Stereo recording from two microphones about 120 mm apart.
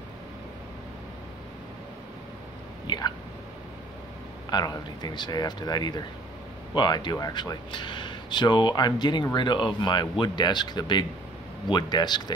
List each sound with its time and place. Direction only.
4.5 s speech: 35° left (ahead or behind)